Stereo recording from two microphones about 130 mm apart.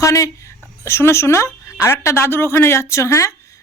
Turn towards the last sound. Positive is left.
turn(degrees=25)  # may be behind; listen again after turning